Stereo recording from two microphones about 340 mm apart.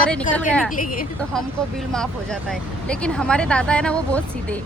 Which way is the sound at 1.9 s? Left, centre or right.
Centre.